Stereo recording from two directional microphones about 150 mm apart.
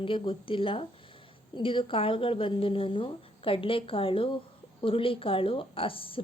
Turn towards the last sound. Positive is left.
turn(degrees=35)  # may be behind; listen again after turning